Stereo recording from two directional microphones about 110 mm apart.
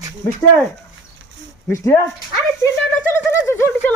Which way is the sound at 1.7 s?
25° left (ahead or behind).